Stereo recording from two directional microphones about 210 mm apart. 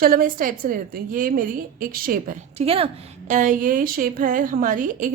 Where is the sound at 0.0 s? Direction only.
40° right (ahead or behind).